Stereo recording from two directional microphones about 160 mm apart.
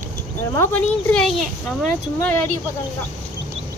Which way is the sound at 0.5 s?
15° left (ahead or behind).